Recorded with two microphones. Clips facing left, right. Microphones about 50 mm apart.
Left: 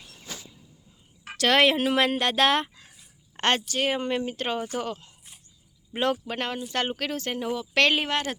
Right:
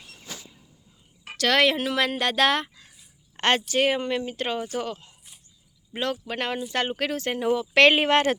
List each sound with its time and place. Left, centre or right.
1.4 s speech: centre
2.1 s speech: centre
3.3 s a sound: centre
3.8 s speech: centre
6.3 s speech: centre
8.1 s speech: right